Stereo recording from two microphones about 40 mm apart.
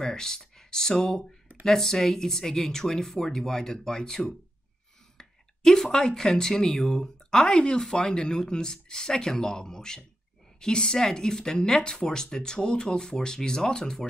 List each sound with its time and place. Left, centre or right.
0.0 s speech: centre